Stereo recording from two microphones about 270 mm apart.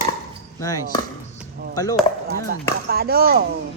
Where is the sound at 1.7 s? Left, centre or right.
Centre.